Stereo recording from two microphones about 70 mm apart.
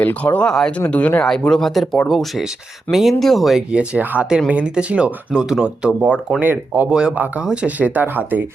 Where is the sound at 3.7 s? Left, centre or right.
Centre.